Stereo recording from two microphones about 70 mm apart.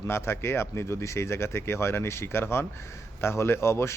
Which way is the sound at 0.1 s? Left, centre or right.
Left.